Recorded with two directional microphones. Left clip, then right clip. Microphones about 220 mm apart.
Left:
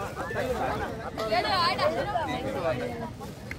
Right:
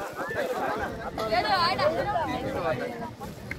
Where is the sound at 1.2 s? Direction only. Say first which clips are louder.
Right 1 dB; 50° left (ahead or behind).